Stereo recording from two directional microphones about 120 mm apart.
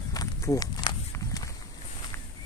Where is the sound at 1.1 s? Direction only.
30° left (ahead or behind).